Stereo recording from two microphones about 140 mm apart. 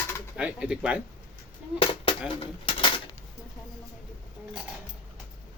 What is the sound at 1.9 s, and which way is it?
Dishes, 40° left (ahead or behind).